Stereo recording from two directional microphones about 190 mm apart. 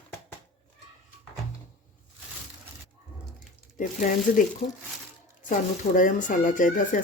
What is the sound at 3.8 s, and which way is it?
Speech, 45° left (ahead or behind).